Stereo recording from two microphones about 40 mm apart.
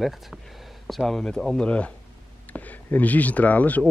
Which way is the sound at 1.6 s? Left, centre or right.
Left.